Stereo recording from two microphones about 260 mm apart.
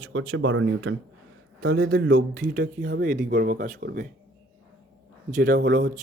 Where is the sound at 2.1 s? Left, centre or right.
Right.